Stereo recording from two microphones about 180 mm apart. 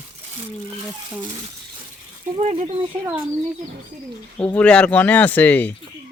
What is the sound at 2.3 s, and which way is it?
Speech, 35° right (ahead or behind).